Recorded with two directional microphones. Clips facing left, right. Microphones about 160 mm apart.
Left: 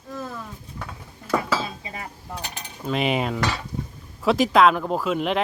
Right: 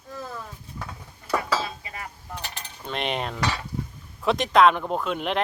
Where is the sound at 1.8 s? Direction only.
25° left (ahead or behind).